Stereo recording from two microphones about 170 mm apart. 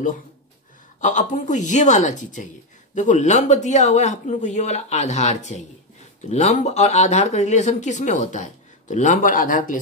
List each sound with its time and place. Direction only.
1.0 s speech: 45° left (ahead or behind)